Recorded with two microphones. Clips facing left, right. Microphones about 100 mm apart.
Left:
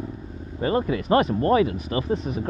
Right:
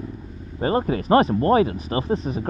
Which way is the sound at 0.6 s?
35° right (ahead or behind).